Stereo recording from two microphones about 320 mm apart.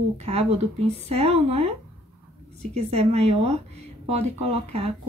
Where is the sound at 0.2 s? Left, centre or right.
Centre.